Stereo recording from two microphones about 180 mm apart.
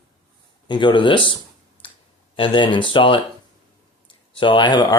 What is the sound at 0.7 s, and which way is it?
Speech, 25° left (ahead or behind).